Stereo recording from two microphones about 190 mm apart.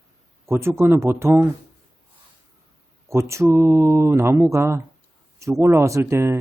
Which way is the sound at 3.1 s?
15° right (ahead or behind).